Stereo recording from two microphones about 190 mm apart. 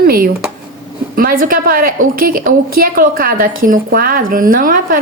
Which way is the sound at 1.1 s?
50° right (ahead or behind).